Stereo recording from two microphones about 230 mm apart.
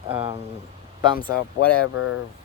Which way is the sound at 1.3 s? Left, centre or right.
Left.